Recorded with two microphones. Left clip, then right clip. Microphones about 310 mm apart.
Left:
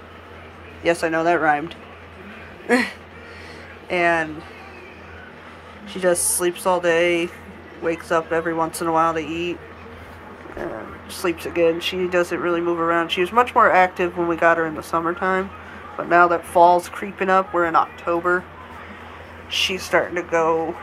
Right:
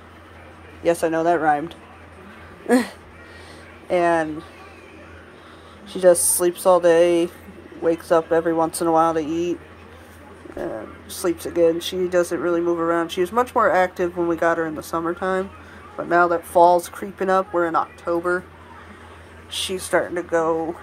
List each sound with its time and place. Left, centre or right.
1.0 s speech: right
3.9 s speech: right
5.9 s speech: right
10.6 s speech: centre
19.7 s speech: centre